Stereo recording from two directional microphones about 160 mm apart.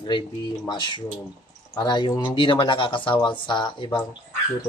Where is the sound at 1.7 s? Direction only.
25° left (ahead or behind).